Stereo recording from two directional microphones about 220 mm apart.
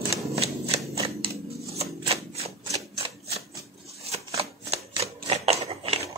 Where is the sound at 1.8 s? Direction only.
30° right (ahead or behind).